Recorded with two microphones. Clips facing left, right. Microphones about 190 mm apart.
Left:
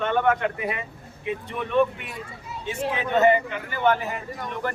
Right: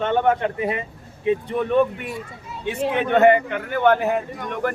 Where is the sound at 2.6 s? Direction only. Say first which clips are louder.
Right 5 dB; 60° right (ahead or behind).